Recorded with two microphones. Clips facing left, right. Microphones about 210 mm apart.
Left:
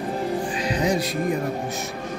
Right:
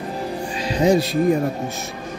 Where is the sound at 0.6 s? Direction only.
25° right (ahead or behind).